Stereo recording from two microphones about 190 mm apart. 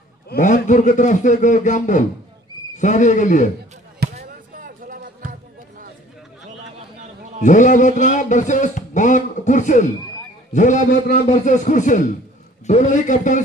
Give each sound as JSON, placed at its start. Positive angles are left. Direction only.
{"t": 0.3, "sound": "a man's voice", "side_deg": 40}
{"t": 4.0, "sound": "basketball bounce", "side_deg": -55}
{"t": 4.6, "sound": "a sound", "side_deg": -45}
{"t": 7.4, "sound": "a man's voice", "side_deg": 40}